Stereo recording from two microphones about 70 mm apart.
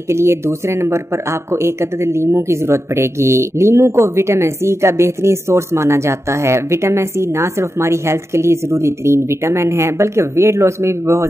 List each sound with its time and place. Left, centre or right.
0.1 s speech: right